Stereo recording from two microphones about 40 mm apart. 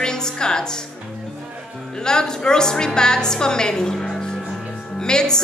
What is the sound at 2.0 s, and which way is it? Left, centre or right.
Speech, centre.